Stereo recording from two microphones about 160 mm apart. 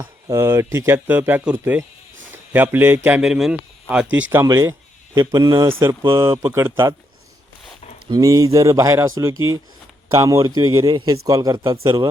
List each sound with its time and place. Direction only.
0.0 s a man's voice: 15° right (ahead or behind)
5.8 s speech: 15° right (ahead or behind)
8.1 s a man's voice: 20° right (ahead or behind)